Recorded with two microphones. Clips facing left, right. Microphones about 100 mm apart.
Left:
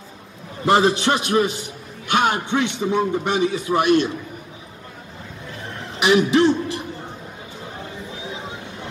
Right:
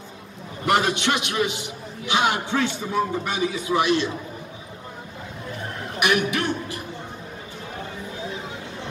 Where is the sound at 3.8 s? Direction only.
50° left (ahead or behind).